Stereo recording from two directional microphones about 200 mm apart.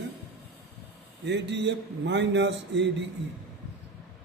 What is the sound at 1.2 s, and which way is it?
A man's voice, 60° right (ahead or behind).